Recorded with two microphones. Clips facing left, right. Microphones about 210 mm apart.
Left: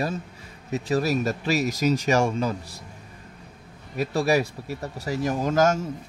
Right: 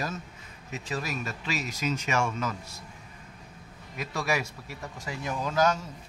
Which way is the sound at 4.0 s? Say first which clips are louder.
Left 8 dB; 35° left (ahead or behind).